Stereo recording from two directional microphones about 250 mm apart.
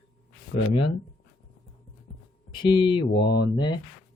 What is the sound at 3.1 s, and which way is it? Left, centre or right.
Speech, left.